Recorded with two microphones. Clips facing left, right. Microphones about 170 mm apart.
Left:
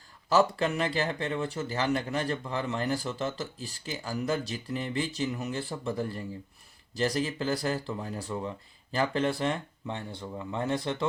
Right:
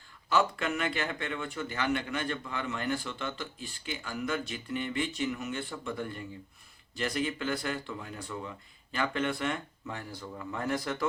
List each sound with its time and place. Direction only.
0.3 s speech: 35° left (ahead or behind)